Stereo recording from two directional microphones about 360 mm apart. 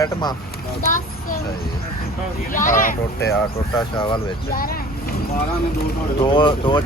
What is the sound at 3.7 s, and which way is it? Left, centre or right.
Speech, centre.